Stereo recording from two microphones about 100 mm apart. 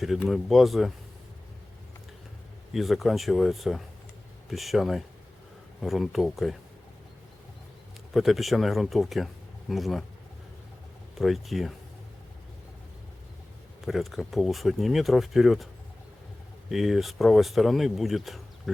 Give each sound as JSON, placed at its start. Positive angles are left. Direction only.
{"t": 0.3, "sound": "speech", "side_deg": 0}
{"t": 2.7, "sound": "speech", "side_deg": 0}
{"t": 8.1, "sound": "speech", "side_deg": 0}
{"t": 11.2, "sound": "speech", "side_deg": 0}
{"t": 13.8, "sound": "speech", "side_deg": 0}
{"t": 16.6, "sound": "speech", "side_deg": 0}